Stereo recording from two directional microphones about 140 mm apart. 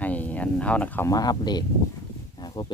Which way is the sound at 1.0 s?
25° left (ahead or behind).